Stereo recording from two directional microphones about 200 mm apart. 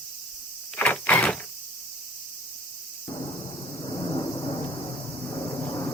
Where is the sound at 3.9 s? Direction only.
25° left (ahead or behind).